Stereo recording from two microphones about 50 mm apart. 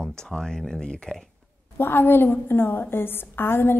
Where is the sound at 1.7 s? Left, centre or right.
Left.